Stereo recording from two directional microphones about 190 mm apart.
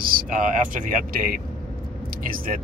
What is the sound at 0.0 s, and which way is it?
Speech, 50° right (ahead or behind).